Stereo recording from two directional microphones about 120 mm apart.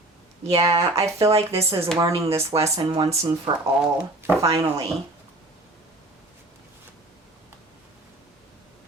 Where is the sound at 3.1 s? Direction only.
35° right (ahead or behind).